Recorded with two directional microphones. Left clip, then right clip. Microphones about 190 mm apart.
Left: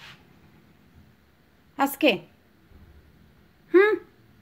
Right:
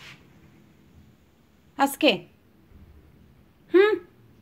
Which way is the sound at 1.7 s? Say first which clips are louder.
Right 1 dB; 10° left (ahead or behind).